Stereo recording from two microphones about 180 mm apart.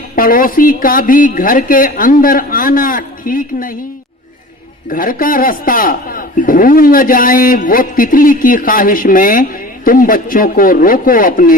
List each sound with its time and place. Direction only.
0.2 s a man's voice: 50° left (ahead or behind)
4.9 s a man's voice: 50° left (ahead or behind)